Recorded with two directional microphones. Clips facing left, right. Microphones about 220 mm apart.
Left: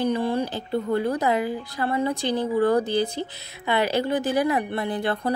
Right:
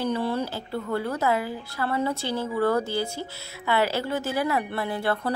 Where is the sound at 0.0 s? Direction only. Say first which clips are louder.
Left 3 dB; 15° left (ahead or behind).